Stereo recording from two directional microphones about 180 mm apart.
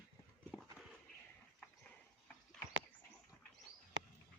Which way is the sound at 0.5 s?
Centre (ahead or behind).